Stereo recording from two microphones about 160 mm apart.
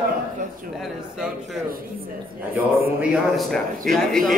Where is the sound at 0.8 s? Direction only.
Centre (ahead or behind).